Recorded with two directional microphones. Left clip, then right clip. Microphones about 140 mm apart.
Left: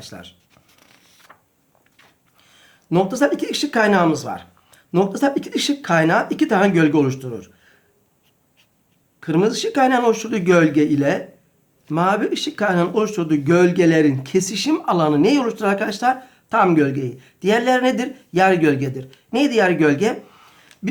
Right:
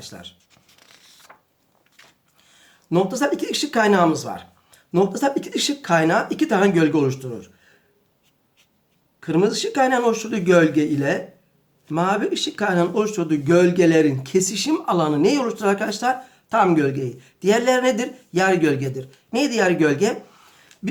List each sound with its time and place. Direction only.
0.0 s speech: 30° left (ahead or behind)
0.5 s a sound: 20° right (ahead or behind)
2.4 s speech: 30° left (ahead or behind)
9.2 s speech: 30° left (ahead or behind)